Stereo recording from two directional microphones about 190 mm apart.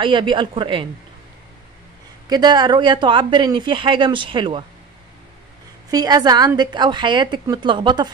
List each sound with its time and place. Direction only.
0.0 s speech: 25° right (ahead or behind)
2.2 s speech: 20° right (ahead or behind)
5.9 s speech: 20° right (ahead or behind)